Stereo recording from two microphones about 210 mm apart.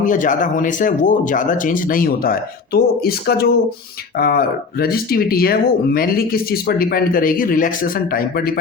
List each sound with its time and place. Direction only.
0.0 s speech: 40° left (ahead or behind)